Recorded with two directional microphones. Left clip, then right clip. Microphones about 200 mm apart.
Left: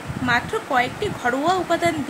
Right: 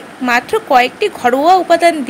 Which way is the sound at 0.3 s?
40° right (ahead or behind).